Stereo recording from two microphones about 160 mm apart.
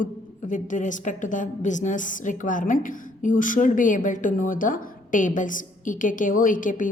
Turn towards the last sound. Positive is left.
turn(degrees=55)  # may be behind; listen again after turning